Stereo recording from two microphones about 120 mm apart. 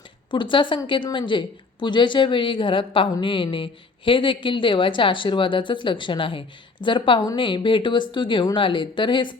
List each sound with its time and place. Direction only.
0.3 s speech: 40° left (ahead or behind)